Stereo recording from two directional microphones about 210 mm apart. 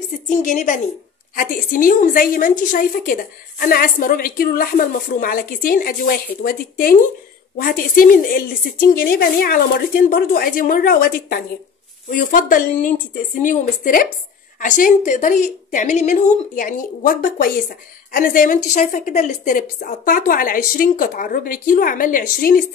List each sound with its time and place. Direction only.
0.4 s a woman's voice: 40° left (ahead or behind)